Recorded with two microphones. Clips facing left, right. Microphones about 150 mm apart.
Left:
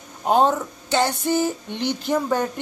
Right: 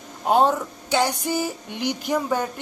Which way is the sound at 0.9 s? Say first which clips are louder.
Left 2 dB; 10° right (ahead or behind).